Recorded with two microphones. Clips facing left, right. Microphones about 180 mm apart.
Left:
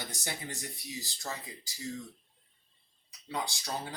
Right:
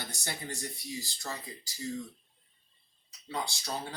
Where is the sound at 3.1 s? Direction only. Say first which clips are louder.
Even; 15° left (ahead or behind).